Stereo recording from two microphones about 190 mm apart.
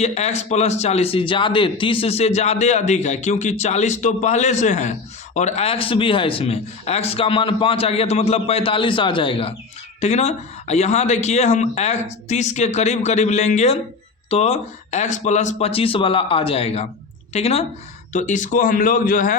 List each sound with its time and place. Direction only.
0.0 s a man's voice: 35° left (ahead or behind)